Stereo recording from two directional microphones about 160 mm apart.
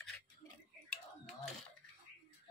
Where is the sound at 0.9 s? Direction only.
Centre (ahead or behind).